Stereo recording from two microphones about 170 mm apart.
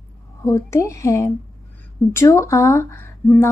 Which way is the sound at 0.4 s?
15° left (ahead or behind).